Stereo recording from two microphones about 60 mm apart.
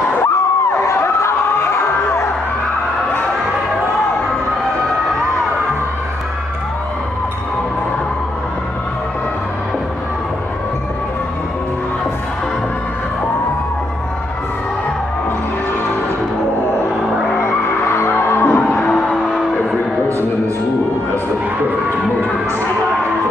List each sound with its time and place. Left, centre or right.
0.2 s a sound: left
17.4 s skidding: left
18.1 s music: left